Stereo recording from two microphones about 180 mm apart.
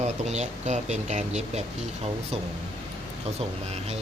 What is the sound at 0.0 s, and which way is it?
Speech, 40° right (ahead or behind).